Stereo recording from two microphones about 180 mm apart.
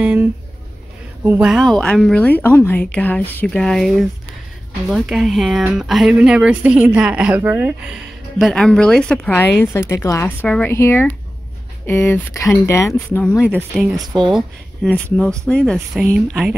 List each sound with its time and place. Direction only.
0.0 s speech: 10° right (ahead or behind); by 13.2 s 15° left (ahead or behind)
13.4 s speech: 10° right (ahead or behind)
13.9 s speech: 25° right (ahead or behind)
14.3 s speech: centre (ahead or behind)